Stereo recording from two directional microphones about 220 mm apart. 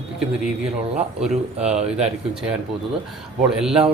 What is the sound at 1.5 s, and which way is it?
Speech, 30° right (ahead or behind).